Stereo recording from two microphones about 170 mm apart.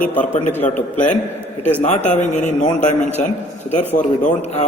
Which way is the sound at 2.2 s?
45° left (ahead or behind).